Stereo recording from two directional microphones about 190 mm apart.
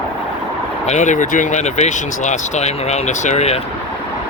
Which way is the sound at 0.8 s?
40° left (ahead or behind).